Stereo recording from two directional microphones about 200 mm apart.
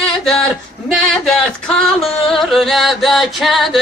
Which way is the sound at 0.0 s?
5° left (ahead or behind).